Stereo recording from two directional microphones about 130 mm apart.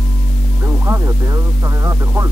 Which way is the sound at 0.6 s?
20° right (ahead or behind).